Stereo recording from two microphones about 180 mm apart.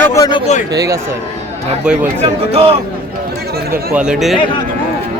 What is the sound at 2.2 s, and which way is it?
Speech, 35° right (ahead or behind).